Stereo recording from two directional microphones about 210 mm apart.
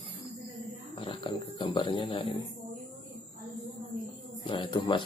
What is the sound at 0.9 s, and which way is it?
Speech, 25° left (ahead or behind).